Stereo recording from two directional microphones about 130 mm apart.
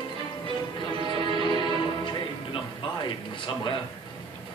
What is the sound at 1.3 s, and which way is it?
Music, 35° left (ahead or behind).